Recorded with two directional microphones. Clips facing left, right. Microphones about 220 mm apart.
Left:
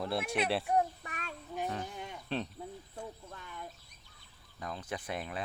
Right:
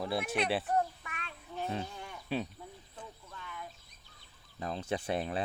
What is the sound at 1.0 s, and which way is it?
Child singing, 40° left (ahead or behind).